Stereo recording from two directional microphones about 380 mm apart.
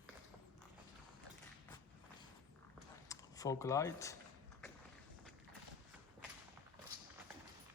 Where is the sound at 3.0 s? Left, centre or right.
Centre.